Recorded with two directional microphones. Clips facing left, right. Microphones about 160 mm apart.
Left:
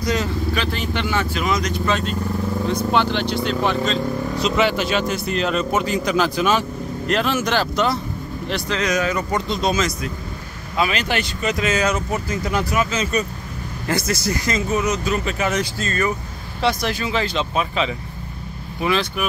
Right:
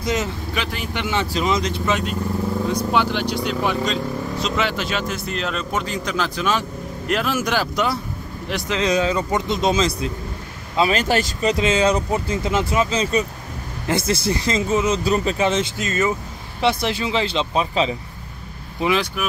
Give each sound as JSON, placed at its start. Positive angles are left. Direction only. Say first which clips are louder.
{"t": 0.0, "sound": "speech", "louder": "left 1 dB", "side_deg": -20}
{"t": 0.7, "sound": "speech", "louder": "left 3 dB", "side_deg": -10}
{"t": 1.3, "sound": "speech", "louder": "right 1 dB", "side_deg": -25}
{"t": 2.6, "sound": "speech", "louder": "left 2 dB", "side_deg": -10}
{"t": 4.4, "sound": "speech", "louder": "left 5 dB", "side_deg": 0}
{"t": 7.1, "sound": "speech", "louder": "left 1 dB", "side_deg": -5}
{"t": 10.9, "sound": "speech", "louder": "right 4 dB", "side_deg": -40}
{"t": 11.5, "sound": "speech", "louder": "right 2 dB", "side_deg": -25}
{"t": 18.8, "sound": "speech", "louder": "right 1 dB", "side_deg": -15}